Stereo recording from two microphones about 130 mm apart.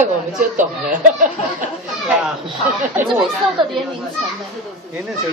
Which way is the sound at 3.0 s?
5° right (ahead or behind).